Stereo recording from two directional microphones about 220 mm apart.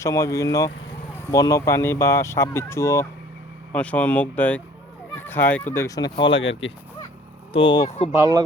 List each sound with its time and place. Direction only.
0.0 s speech: 15° left (ahead or behind)
6.2 s speech: 60° left (ahead or behind)
7.5 s speech: 20° left (ahead or behind)
8.1 s speech: 15° right (ahead or behind)